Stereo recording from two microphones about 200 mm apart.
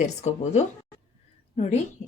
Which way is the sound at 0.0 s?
35° left (ahead or behind).